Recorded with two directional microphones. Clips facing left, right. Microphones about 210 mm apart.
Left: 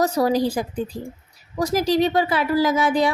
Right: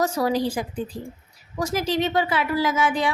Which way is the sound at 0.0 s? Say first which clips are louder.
Left 3 dB; 40° left (ahead or behind).